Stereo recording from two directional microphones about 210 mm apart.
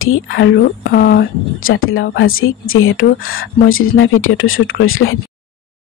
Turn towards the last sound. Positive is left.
turn(degrees=75)  # may be behind; listen again after turning